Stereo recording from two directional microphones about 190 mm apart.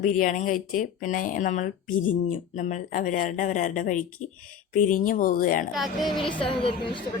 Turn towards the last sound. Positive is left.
turn(degrees=25)  # may be behind; listen again after turning